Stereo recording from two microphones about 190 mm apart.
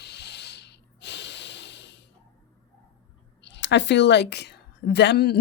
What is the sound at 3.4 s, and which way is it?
A woman's voice, 70° left (ahead or behind).